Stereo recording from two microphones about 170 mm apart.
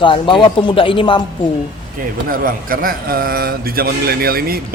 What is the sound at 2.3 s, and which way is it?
A man's voice, 55° right (ahead or behind).